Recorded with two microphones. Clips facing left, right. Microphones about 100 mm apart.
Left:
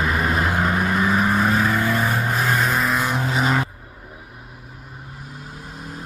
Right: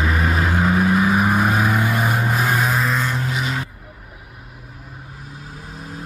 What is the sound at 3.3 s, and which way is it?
Vehicle, 40° left (ahead or behind).